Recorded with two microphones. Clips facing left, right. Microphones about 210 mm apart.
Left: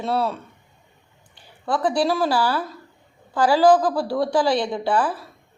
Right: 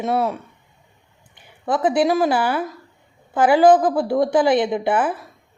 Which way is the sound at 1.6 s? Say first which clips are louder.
Right 3 dB; 20° right (ahead or behind).